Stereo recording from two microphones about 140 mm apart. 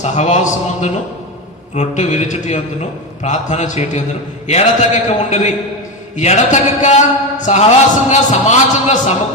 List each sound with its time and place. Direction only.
0.0 s a man's voice: 55° left (ahead or behind)